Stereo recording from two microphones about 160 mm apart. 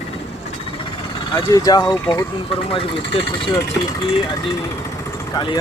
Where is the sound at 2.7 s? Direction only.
35° left (ahead or behind).